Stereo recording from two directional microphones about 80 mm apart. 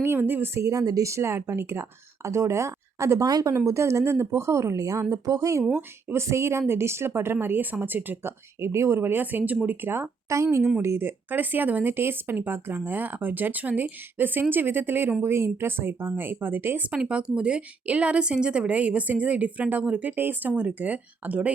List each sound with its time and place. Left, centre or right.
0.0 s speech: right
3.2 s speech: right
3.7 s speech: right
5.7 s speech: right
10.2 s speech: right
16.9 s speech: centre